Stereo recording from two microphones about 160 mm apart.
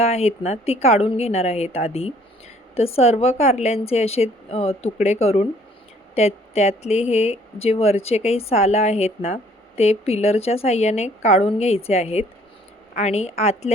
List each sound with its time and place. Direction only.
0.0 s speech: 40° left (ahead or behind)